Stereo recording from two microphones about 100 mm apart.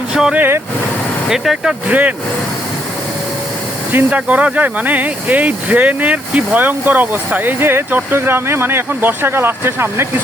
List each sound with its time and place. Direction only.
0.1 s speech: 5° right (ahead or behind)
0.3 s speech: 20° right (ahead or behind)
1.3 s speech: 5° right (ahead or behind)
1.9 s speech: 15° right (ahead or behind)
3.9 s speech: 15° right (ahead or behind)